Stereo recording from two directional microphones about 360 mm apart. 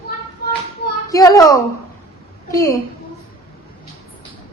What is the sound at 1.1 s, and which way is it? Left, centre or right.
A child's voice, centre.